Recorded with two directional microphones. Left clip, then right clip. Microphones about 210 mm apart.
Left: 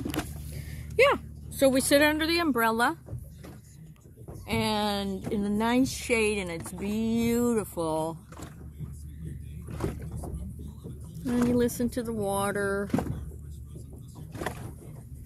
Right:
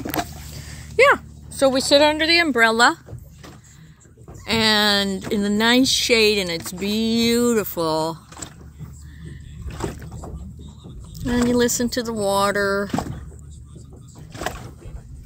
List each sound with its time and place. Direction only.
0.5 s a sound: 5° right (ahead or behind)
2.5 s speech: 20° right (ahead or behind)
4.5 s speech: 45° right (ahead or behind)
11.1 s speech: 35° right (ahead or behind)